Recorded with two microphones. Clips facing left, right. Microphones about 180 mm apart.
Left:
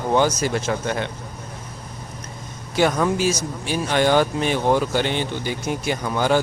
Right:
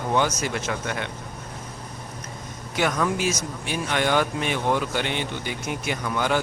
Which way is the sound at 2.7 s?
30° left (ahead or behind).